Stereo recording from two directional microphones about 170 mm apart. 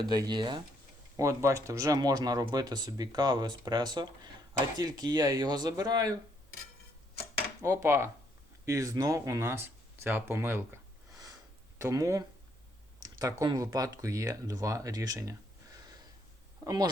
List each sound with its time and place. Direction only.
0.0 s speech: 25° right (ahead or behind)
7.6 s speech: 15° right (ahead or behind)
11.8 s speech: 15° right (ahead or behind)